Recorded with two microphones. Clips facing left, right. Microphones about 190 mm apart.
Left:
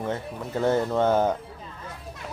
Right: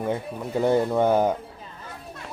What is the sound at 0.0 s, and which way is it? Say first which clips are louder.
Speech: right 3 dB; 15° right (ahead or behind).